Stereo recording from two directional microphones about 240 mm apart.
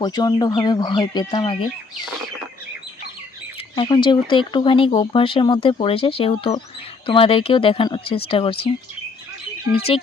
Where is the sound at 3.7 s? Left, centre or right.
Centre.